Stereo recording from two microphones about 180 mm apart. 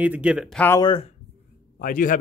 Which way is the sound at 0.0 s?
10° right (ahead or behind).